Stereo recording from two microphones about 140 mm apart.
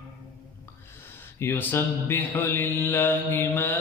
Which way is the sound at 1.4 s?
15° left (ahead or behind).